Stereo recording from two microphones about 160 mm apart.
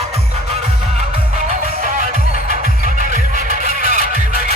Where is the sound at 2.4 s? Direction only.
55° right (ahead or behind).